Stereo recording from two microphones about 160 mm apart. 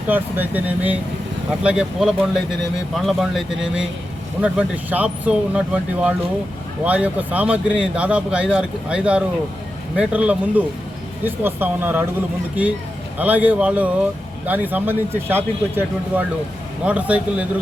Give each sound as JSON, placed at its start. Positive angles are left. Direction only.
{"t": 0.1, "sound": "speech", "side_deg": -10}
{"t": 13.1, "sound": "speech", "side_deg": -10}